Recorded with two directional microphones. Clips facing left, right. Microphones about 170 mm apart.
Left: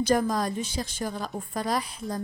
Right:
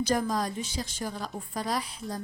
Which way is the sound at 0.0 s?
55° left (ahead or behind).